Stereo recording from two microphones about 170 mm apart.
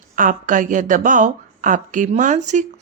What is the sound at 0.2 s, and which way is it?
A woman's voice, 50° right (ahead or behind).